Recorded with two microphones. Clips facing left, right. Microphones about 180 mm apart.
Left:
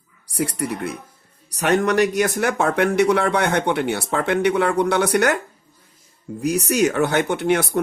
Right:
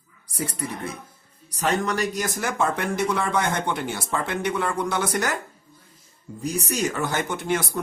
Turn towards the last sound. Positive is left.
turn(degrees=65)  # may be behind; listen again after turning